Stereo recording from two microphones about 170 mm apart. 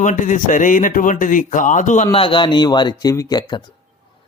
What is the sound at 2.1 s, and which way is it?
A man's voice, 30° left (ahead or behind).